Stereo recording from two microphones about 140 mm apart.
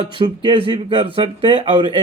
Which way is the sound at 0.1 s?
35° right (ahead or behind).